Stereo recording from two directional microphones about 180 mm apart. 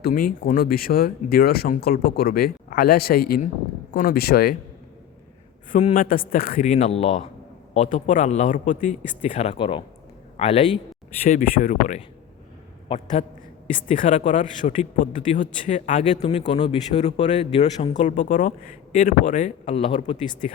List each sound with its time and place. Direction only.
0.0 s speech: 50° left (ahead or behind)
5.7 s a man's voice: 45° left (ahead or behind)
11.3 s speech: 45° left (ahead or behind)
13.8 s a man's voice: 45° left (ahead or behind)